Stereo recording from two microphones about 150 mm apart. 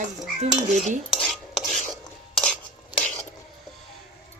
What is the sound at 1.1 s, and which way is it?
Cutlery, centre (ahead or behind).